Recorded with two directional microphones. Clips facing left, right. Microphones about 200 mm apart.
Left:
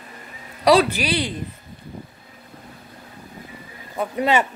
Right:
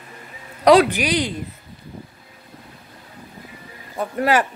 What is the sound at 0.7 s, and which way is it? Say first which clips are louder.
Speech: right 2 dB; 15° right (ahead or behind).